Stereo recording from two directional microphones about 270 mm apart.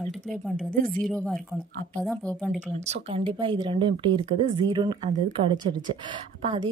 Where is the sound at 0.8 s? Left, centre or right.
Centre.